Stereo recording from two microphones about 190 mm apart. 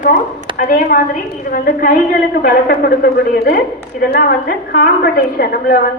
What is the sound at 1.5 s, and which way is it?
A man's voice, 45° left (ahead or behind).